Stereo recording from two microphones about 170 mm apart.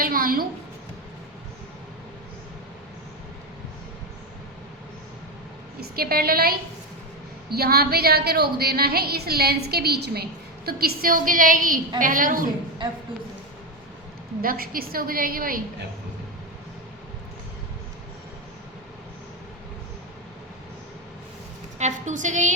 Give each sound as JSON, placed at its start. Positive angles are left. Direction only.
{"t": 0.0, "sound": "a sound", "side_deg": -55}
{"t": 5.8, "sound": "a woman's voice", "side_deg": -60}
{"t": 14.4, "sound": "a woman's voice", "side_deg": -60}
{"t": 21.8, "sound": "a woman's voice", "side_deg": -45}